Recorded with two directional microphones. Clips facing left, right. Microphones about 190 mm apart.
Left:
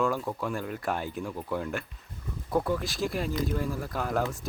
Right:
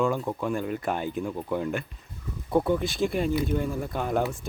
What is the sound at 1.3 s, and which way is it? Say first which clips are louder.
Speech: right 3 dB; 15° right (ahead or behind).